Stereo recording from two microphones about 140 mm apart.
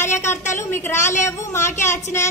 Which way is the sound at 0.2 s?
20° left (ahead or behind).